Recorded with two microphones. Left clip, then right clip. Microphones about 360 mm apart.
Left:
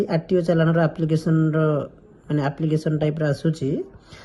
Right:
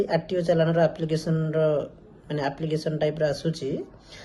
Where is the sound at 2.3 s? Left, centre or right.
Centre.